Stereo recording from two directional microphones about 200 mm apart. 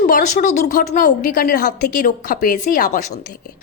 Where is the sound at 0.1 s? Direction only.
40° left (ahead or behind).